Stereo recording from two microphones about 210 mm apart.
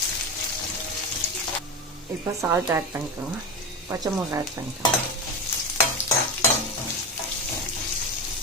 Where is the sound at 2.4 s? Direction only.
15° right (ahead or behind).